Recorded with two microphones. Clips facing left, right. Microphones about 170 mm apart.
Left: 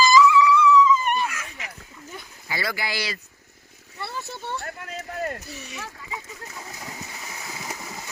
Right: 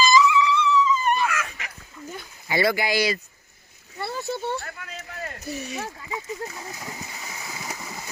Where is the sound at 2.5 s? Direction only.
20° right (ahead or behind).